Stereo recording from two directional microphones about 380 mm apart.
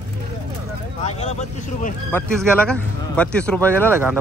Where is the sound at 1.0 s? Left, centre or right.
Centre.